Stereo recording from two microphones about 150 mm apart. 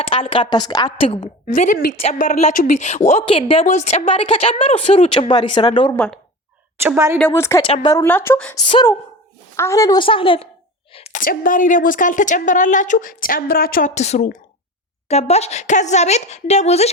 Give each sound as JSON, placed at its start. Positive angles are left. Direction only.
{"t": 0.0, "sound": "speech", "side_deg": 35}
{"t": 1.5, "sound": "a woman's voice", "side_deg": 60}
{"t": 3.2, "sound": "speech", "side_deg": 35}
{"t": 3.7, "sound": "speech", "side_deg": 50}
{"t": 5.3, "sound": "speech", "side_deg": 30}
{"t": 6.7, "sound": "a woman's voice", "side_deg": -15}
{"t": 7.2, "sound": "a woman's voice", "side_deg": 15}
{"t": 9.6, "sound": "speech", "side_deg": 20}
{"t": 10.9, "sound": "a sound", "side_deg": 45}
{"t": 11.2, "sound": "a woman's voice", "side_deg": 65}
{"t": 13.9, "sound": "speech", "side_deg": 50}